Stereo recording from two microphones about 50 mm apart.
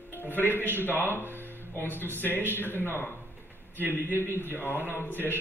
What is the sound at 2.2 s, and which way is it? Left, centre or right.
Speech, left.